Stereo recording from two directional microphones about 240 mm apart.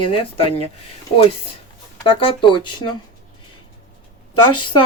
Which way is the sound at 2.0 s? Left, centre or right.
Left.